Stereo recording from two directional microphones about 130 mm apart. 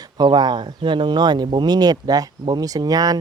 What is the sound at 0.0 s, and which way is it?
Speech, 35° right (ahead or behind).